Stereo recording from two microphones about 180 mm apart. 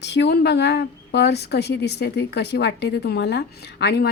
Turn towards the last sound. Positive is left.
turn(degrees=65)  # may be behind; listen again after turning